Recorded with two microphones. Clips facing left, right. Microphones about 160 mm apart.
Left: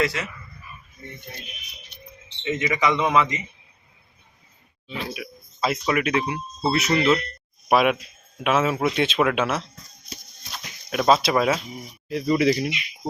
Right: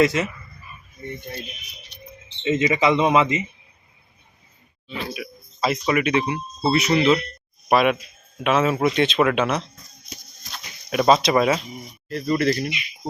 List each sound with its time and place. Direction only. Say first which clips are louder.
0.0 s speech: right 6 dB; 20° right (ahead or behind)
2.4 s speech: right 4 dB; 25° right (ahead or behind)
5.1 s speech: right 2 dB; centre (ahead or behind)